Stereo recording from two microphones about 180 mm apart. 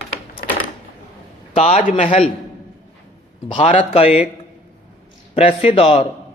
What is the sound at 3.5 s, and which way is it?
Speech, 35° left (ahead or behind).